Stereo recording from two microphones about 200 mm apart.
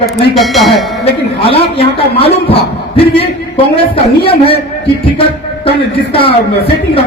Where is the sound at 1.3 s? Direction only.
30° left (ahead or behind).